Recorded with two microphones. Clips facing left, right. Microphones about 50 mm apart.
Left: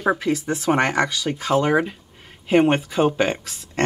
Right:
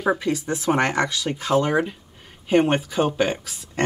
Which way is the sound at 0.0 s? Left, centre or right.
Centre.